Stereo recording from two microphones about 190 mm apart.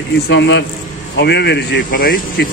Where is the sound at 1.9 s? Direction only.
50° left (ahead or behind).